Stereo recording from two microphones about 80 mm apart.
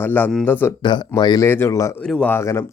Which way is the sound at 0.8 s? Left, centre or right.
Left.